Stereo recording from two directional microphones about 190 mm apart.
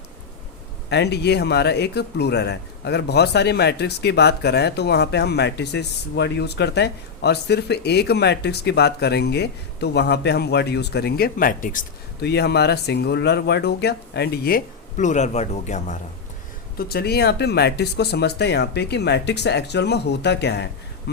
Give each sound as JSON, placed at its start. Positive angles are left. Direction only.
{"t": 0.9, "sound": "speech", "side_deg": 60}
{"t": 16.7, "sound": "speech", "side_deg": 55}